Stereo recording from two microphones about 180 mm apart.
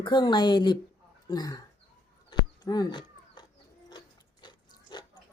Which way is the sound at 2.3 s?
20° left (ahead or behind).